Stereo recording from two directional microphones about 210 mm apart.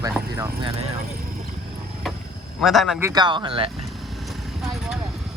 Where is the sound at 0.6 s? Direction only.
30° right (ahead or behind).